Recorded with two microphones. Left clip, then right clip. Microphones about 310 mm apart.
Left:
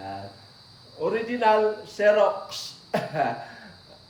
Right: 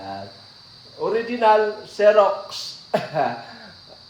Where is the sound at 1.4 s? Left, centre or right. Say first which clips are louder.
Right 4 dB; centre.